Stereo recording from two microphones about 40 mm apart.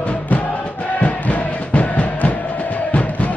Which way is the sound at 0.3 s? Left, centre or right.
Left.